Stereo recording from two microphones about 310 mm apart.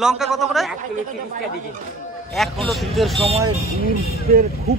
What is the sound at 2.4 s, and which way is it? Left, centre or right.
Speech, centre.